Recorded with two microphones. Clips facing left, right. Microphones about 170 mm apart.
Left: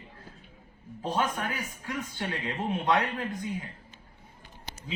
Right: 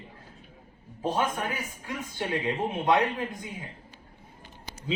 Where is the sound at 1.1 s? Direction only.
25° right (ahead or behind).